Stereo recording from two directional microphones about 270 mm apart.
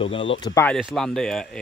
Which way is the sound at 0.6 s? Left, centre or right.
Centre.